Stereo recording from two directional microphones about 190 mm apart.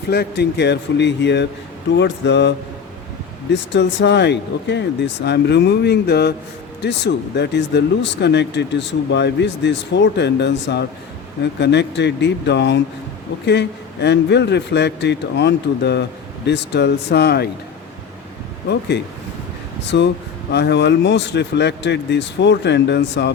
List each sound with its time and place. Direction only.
0.1 s speech: 60° left (ahead or behind)
18.7 s speech: 65° left (ahead or behind)